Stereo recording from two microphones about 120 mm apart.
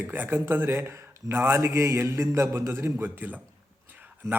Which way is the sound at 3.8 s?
15° right (ahead or behind).